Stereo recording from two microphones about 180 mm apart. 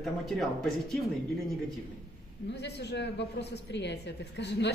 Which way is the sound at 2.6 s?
70° left (ahead or behind).